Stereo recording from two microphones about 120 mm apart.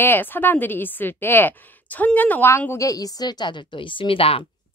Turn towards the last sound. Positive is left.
turn(degrees=50)  # may be behind; listen again after turning